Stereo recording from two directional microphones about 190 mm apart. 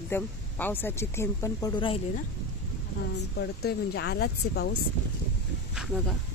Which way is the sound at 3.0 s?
60° left (ahead or behind).